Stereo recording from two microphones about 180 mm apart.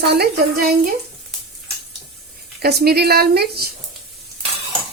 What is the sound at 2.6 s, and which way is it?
Speech, 60° right (ahead or behind).